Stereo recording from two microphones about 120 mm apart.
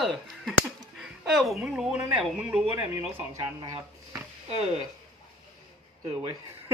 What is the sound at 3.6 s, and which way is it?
Speech, 30° right (ahead or behind).